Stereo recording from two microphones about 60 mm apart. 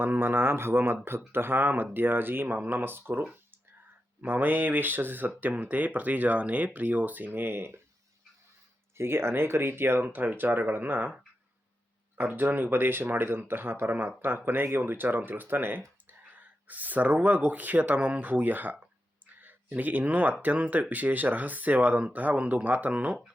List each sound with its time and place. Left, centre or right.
0.0 s speech: right
9.0 s speech: right
12.1 s speech: right